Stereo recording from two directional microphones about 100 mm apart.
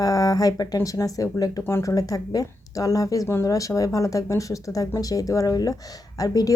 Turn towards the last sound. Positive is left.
turn(degrees=40)  # may be behind; listen again after turning